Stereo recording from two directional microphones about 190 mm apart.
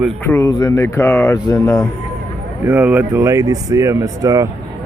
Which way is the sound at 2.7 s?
10° right (ahead or behind).